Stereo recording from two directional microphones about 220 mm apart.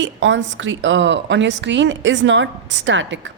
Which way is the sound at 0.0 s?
55° right (ahead or behind).